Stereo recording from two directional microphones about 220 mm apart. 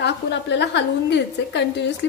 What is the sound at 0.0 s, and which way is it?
A woman's voice, 50° left (ahead or behind).